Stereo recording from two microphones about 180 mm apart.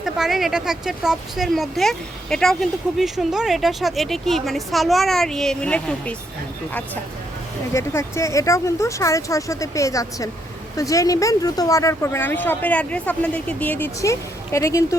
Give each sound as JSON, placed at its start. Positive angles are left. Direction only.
{"t": 0.0, "sound": "speech", "side_deg": 0}
{"t": 7.7, "sound": "speech", "side_deg": 15}